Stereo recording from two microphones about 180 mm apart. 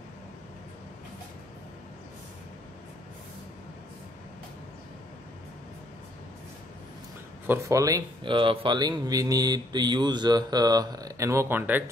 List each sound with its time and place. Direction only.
7.4 s speech: 15° right (ahead or behind)